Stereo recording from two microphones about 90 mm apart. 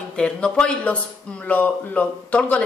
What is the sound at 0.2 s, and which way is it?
Speech, 10° left (ahead or behind).